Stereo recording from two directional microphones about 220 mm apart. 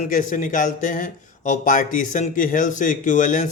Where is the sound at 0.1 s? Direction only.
35° left (ahead or behind).